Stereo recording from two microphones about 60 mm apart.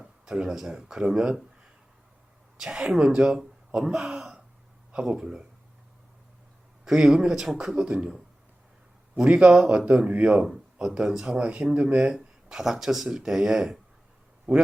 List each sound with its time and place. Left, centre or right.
0.0 s speech: centre
2.6 s speech: centre
6.8 s speech: centre
7.8 s a man's voice: centre
9.1 s speech: centre
10.4 s speech: centre
12.1 s speech: centre
14.5 s a man's voice: right